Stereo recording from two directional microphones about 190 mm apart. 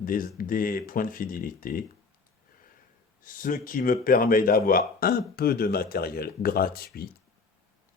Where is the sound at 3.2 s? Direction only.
45° left (ahead or behind).